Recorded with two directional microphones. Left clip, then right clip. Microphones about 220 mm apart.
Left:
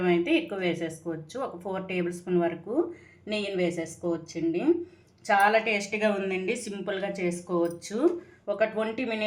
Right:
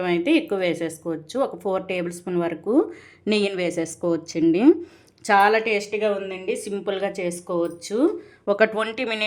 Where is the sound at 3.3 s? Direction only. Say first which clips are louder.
Right 6 dB; 50° right (ahead or behind); by 8.0 s 30° right (ahead or behind).